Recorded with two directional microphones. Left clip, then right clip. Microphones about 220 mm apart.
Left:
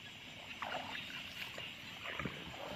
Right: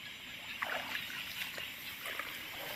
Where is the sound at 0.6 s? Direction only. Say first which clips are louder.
Right 4 dB; 55° right (ahead or behind).